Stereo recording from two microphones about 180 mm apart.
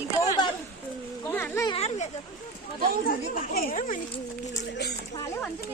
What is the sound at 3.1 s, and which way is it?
Speech, 50° left (ahead or behind).